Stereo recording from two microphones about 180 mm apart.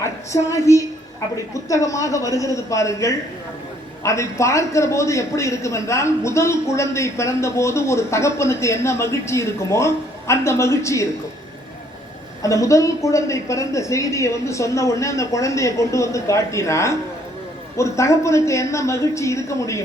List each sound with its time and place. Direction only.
0.0 s a woman's voice: 15° left (ahead or behind)
12.4 s a man's voice: 20° left (ahead or behind)